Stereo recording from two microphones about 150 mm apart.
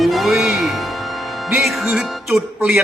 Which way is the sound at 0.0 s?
Centre (ahead or behind).